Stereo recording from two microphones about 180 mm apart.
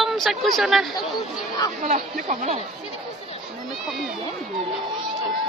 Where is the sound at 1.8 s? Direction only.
45° right (ahead or behind).